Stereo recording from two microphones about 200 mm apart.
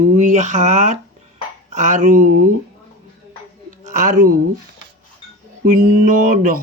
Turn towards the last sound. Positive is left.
turn(degrees=-40)  # may be behind; listen again after turning